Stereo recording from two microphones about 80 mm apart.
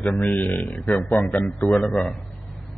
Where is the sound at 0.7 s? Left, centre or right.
Centre.